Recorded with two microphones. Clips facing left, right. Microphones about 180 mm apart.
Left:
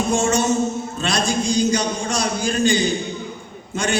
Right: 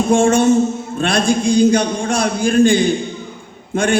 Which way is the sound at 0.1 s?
55° right (ahead or behind).